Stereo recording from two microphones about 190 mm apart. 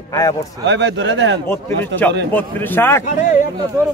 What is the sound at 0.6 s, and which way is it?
Speech, 70° right (ahead or behind).